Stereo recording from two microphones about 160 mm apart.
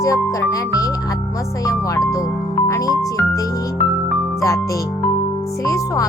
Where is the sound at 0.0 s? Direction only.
20° left (ahead or behind).